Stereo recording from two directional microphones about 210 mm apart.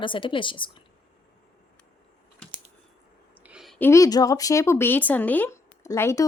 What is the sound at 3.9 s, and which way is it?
Speech, 15° left (ahead or behind).